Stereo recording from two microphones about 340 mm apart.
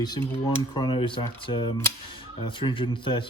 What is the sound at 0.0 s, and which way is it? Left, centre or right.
Speech, centre.